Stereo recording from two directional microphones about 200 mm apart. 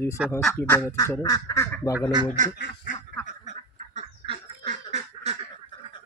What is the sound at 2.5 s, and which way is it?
Duck, 50° left (ahead or behind).